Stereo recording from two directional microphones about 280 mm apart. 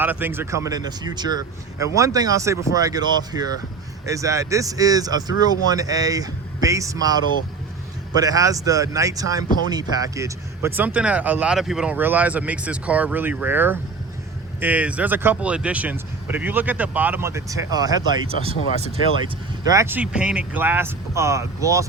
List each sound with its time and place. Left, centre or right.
0.0 s speech: centre
19.6 s speech: centre